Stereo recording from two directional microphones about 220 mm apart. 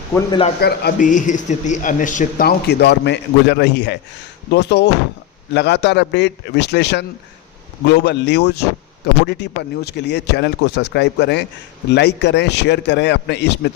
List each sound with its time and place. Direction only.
0.3 s a man's voice: 25° left (ahead or behind)
0.6 s a man's voice: 40° left (ahead or behind)